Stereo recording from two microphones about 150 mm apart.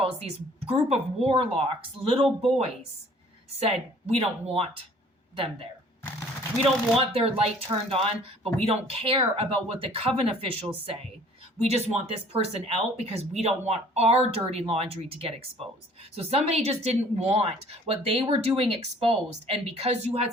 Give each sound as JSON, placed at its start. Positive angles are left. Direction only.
{"t": 0.0, "sound": "speech", "side_deg": -40}
{"t": 3.6, "sound": "speech", "side_deg": -40}
{"t": 6.9, "sound": "speech", "side_deg": -40}